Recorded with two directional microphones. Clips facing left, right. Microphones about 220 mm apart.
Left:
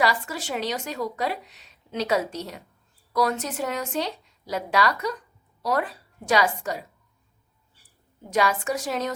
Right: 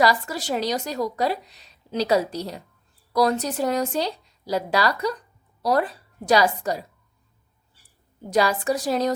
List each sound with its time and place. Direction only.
0.0 s a woman's voice: 40° right (ahead or behind)
8.3 s a woman's voice: 35° right (ahead or behind)